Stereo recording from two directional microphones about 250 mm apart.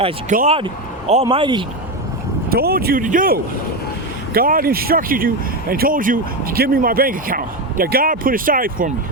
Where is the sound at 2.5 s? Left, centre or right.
Right.